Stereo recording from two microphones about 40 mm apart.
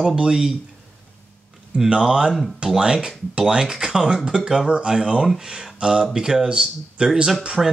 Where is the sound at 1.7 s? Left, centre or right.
Centre.